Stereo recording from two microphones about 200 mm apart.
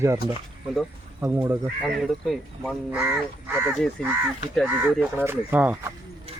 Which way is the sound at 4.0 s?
5° left (ahead or behind).